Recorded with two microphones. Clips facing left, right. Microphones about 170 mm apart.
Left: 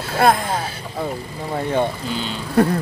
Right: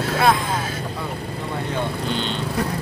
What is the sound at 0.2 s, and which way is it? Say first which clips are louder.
Speech: left 4 dB; 50° left (ahead or behind).